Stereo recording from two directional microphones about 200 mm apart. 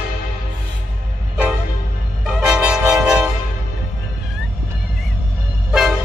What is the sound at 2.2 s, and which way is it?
Vehicle, 5° right (ahead or behind).